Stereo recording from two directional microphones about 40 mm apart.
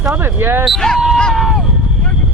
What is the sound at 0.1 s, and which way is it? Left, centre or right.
Speech, right.